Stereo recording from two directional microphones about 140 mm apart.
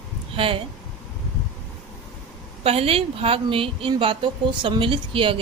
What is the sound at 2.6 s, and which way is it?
A woman's voice, 45° right (ahead or behind).